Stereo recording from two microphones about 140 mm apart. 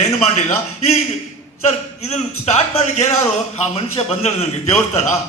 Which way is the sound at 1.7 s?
50° left (ahead or behind).